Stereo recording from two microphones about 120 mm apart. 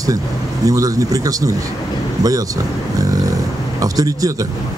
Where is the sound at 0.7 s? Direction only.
30° right (ahead or behind).